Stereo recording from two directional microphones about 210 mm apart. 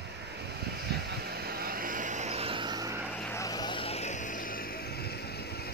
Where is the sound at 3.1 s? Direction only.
10° left (ahead or behind).